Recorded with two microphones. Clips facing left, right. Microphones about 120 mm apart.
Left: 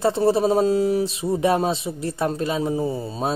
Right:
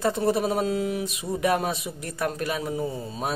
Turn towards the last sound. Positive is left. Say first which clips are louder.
# left 5 dB
turn(degrees=30)  # may be behind; listen again after turning